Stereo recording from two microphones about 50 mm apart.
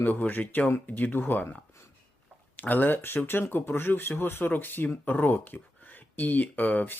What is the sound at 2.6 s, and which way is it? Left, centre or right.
Speech, left.